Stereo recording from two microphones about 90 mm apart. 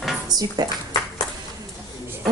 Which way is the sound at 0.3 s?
50° right (ahead or behind).